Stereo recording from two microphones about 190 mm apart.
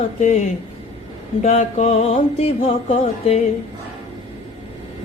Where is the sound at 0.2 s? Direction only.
35° left (ahead or behind).